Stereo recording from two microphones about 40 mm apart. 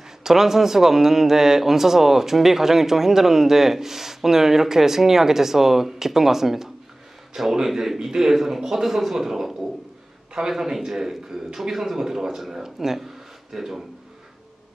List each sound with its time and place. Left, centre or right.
0.2 s a man's voice: centre